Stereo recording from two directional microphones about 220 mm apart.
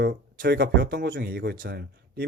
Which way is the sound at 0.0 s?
45° right (ahead or behind).